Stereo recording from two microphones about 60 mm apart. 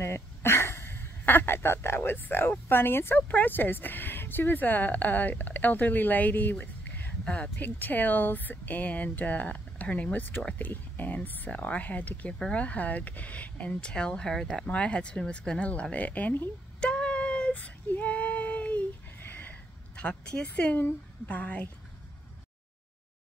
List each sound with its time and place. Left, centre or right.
0.0 s a sound: left
2.7 s a woman's voice: left
16.8 s female singing: centre
20.8 s speech: left